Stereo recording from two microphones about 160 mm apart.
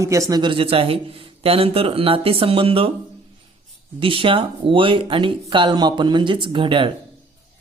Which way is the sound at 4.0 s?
35° right (ahead or behind).